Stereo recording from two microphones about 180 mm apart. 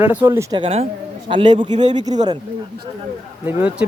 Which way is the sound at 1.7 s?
40° right (ahead or behind).